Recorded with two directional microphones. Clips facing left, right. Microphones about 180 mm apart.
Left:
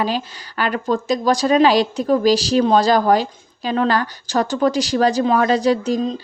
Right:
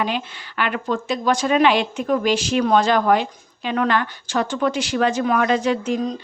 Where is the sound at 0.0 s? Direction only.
35° left (ahead or behind).